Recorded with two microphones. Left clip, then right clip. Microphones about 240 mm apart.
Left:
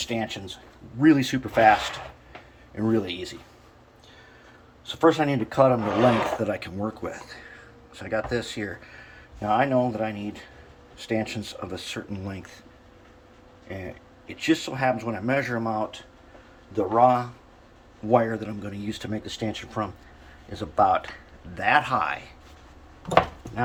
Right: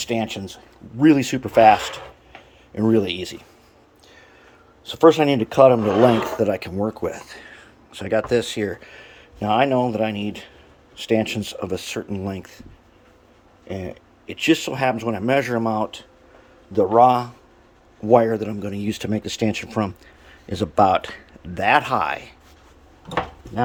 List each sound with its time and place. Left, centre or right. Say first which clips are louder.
0.0 s speech: right 5 dB; right
4.9 s speech: right 6 dB; right
13.7 s speech: right 6 dB; right